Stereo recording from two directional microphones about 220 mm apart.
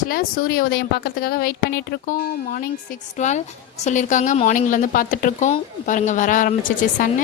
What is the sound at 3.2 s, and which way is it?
A woman's voice, 30° left (ahead or behind).